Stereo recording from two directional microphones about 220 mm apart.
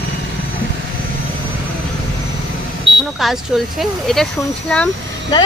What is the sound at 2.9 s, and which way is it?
Smoke detector, 55° right (ahead or behind).